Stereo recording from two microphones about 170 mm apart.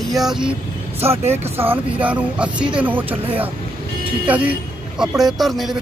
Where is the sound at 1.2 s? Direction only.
40° right (ahead or behind).